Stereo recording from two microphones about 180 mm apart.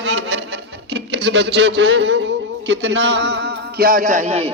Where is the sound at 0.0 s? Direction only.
85° right.